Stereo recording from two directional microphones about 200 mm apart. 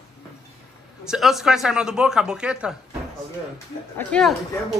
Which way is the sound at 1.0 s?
Centre (ahead or behind).